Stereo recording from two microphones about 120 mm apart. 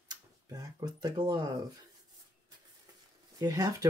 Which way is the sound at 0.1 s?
35° right (ahead or behind).